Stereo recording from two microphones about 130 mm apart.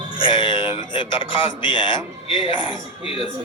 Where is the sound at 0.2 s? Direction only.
40° left (ahead or behind).